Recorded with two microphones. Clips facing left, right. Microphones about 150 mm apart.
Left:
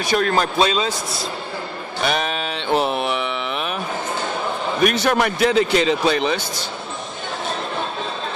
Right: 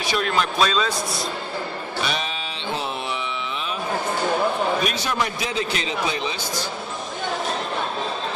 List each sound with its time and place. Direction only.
0.0 s a man's voice: 45° left (ahead or behind)
0.6 s a man's voice: 25° left (ahead or behind)
2.0 s music: 55° left (ahead or behind)
4.8 s a man's voice: 60° left (ahead or behind)